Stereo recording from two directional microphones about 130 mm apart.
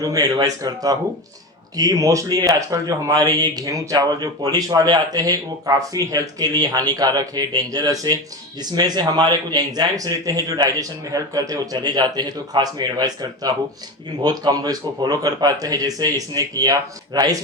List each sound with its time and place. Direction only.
0.0 s a man's voice: 30° right (ahead or behind)